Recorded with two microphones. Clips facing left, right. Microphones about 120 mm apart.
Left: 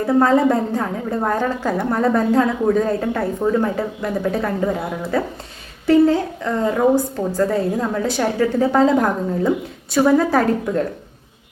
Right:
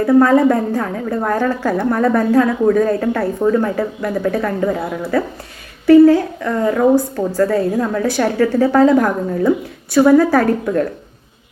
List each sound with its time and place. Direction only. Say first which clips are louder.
0.0 s a woman's voice: right 4 dB; 25° left (ahead or behind)